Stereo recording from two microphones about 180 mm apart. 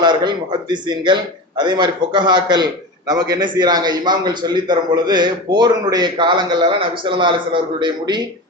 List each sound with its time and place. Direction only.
0.0 s a man's voice: 25° right (ahead or behind)